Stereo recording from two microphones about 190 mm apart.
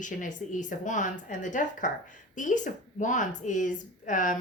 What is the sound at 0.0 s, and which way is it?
A woman's voice, 40° left (ahead or behind).